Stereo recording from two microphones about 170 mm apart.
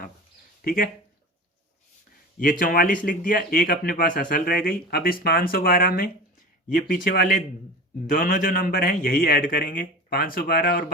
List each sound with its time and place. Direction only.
0.6 s speech: 55° left (ahead or behind)
2.4 s a man's voice: 50° left (ahead or behind)